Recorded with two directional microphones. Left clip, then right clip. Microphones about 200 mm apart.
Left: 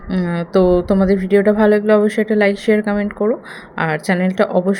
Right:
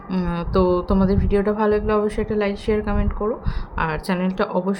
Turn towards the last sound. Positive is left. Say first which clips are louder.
# left 6 dB
turn(degrees=20)  # may be behind; listen again after turning